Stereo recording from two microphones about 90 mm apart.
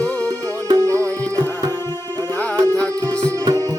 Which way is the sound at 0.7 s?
40° right (ahead or behind).